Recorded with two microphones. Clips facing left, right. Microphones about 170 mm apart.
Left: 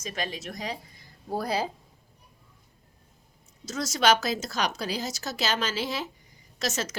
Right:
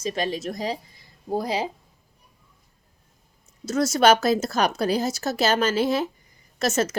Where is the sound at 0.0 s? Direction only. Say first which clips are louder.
Right 8 dB; 35° right (ahead or behind).